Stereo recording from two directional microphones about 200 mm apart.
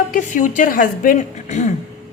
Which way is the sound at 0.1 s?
40° left (ahead or behind).